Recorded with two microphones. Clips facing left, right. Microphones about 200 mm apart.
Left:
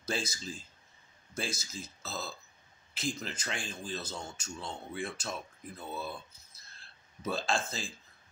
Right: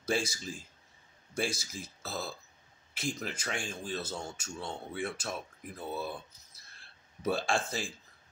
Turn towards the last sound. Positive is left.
turn(degrees=-15)  # may be behind; listen again after turning